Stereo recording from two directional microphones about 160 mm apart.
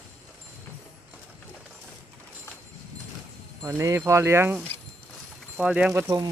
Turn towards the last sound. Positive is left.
turn(degrees=-20)  # may be behind; listen again after turning